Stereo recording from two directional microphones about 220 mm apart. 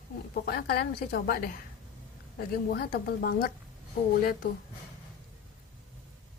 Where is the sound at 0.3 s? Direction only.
45° left (ahead or behind).